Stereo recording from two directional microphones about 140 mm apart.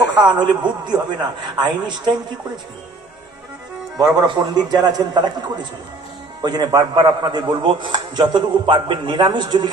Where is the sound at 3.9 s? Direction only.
30° right (ahead or behind).